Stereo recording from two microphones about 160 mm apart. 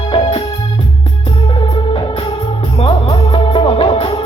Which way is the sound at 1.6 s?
30° left (ahead or behind).